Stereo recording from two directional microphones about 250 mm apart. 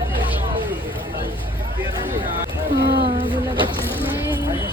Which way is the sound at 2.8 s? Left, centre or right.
Right.